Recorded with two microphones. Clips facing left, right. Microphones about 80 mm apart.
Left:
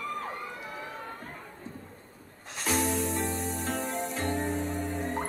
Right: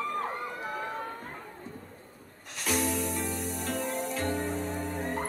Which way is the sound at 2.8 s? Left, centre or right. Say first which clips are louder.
Left 2 dB; left.